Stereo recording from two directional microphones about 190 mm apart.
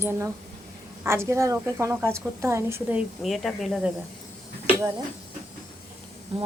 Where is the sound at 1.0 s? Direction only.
15° right (ahead or behind).